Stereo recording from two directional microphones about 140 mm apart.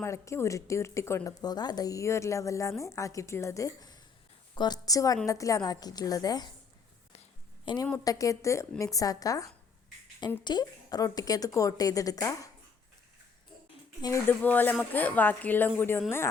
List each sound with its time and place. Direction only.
0.0 s speech: 20° left (ahead or behind)
7.6 s a woman's voice: 35° left (ahead or behind)
14.0 s a woman's voice: 20° left (ahead or behind)